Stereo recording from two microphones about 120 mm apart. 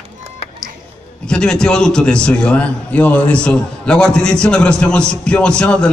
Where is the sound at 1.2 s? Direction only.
5° left (ahead or behind).